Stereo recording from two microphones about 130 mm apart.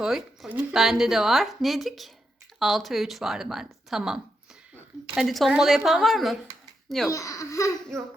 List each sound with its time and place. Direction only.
0.0 s speech: 5° right (ahead or behind)
7.1 s speech: 25° left (ahead or behind)